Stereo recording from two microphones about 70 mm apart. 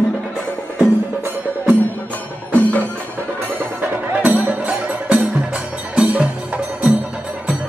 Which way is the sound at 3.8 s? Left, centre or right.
Right.